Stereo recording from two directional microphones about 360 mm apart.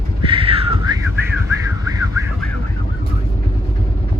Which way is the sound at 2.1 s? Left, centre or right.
Centre.